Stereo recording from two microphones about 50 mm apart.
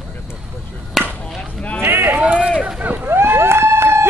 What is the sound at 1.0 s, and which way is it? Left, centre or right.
Chop, centre.